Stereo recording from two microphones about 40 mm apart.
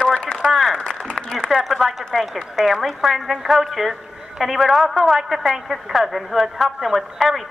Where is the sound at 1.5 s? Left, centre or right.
Centre.